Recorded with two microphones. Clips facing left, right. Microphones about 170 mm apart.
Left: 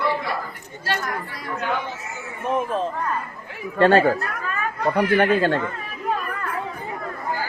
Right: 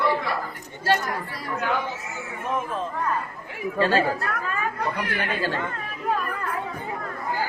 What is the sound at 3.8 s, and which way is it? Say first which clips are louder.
Speech: left 6 dB; 65° left (ahead or behind).